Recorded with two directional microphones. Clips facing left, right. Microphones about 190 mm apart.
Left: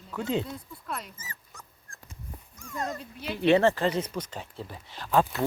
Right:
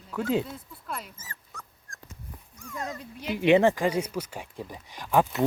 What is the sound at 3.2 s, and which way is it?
Speech, 15° right (ahead or behind).